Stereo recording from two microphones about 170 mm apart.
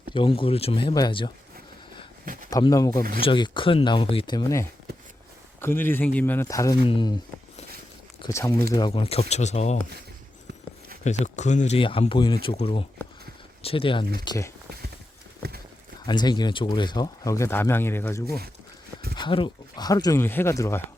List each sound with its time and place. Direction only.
0.1 s speech: 30° left (ahead or behind)
2.2 s a sound: 55° right (ahead or behind)
2.5 s speech: 20° left (ahead or behind)
8.3 s speech: 15° left (ahead or behind)
8.9 s speech: 35° left (ahead or behind)
11.0 s speech: 45° left (ahead or behind); by 14.5 s 20° left (ahead or behind)
15.4 s clip-clop: 70° right (ahead or behind)
16.0 s speech: 25° left (ahead or behind)
19.1 s speech: 30° left (ahead or behind)